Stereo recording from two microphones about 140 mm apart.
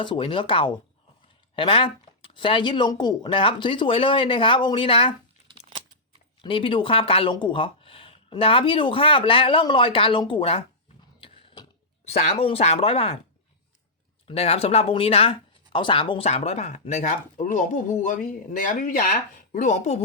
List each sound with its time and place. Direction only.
0.0 s speech: 35° left (ahead or behind)
6.4 s speech: 40° left (ahead or behind)
11.2 s a sound: 40° left (ahead or behind)
12.0 s speech: 50° left (ahead or behind)
14.3 s speech: 45° left (ahead or behind); by 19.1 s 70° left (ahead or behind)
19.5 s speech: 60° left (ahead or behind)